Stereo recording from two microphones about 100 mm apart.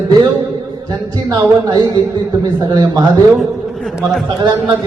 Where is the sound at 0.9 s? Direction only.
45° right (ahead or behind).